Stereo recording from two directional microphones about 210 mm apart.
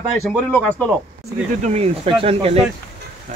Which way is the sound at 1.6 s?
35° right (ahead or behind).